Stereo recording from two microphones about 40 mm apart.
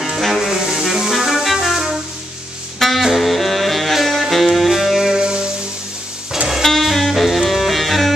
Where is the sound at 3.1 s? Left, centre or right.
Centre.